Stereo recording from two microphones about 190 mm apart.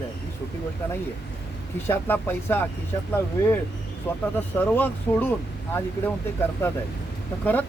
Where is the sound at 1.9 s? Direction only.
10° left (ahead or behind).